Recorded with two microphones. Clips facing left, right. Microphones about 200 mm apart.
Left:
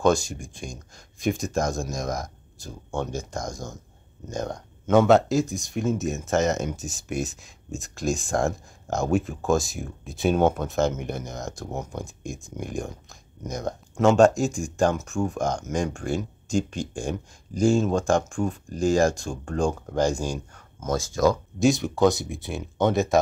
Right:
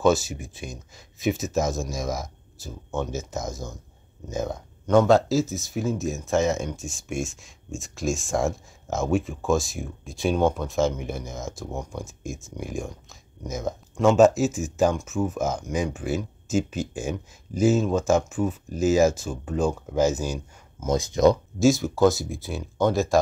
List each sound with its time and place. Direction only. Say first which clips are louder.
0.0 s speech: right 1 dB; 5° right (ahead or behind)
20.9 s speech: right 3 dB; 20° right (ahead or behind)
21.5 s speech: right 1 dB; centre (ahead or behind)